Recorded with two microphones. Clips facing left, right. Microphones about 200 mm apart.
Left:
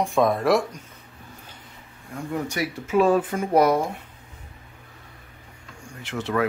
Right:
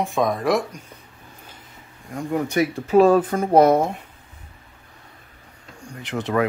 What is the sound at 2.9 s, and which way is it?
Speech, 40° right (ahead or behind).